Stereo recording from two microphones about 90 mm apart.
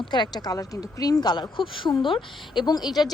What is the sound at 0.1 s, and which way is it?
Speech, 60° left (ahead or behind).